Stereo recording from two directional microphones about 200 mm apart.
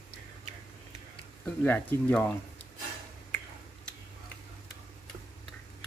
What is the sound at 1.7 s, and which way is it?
Speech, 10° left (ahead or behind).